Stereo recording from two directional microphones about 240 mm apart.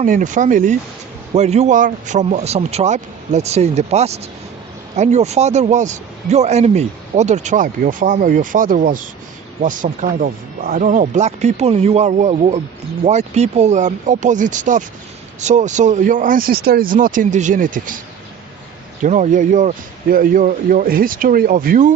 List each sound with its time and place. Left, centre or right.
0.0 s a man's voice: right
19.0 s a man's voice: right